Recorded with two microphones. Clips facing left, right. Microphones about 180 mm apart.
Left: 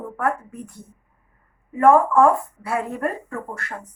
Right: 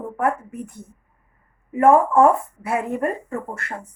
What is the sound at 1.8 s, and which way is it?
Speech, 20° right (ahead or behind).